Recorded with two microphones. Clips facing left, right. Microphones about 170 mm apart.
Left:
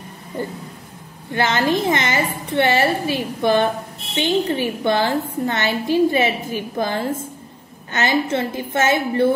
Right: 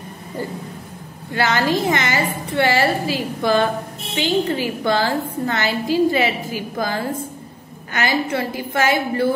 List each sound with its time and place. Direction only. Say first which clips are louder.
1.3 s a woman's voice: even; 20° left (ahead or behind)